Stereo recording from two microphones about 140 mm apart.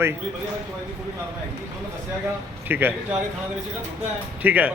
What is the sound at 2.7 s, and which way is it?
Speech, 15° right (ahead or behind).